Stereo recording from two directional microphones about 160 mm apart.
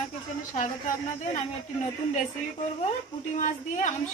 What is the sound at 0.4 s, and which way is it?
A woman's voice, 50° left (ahead or behind).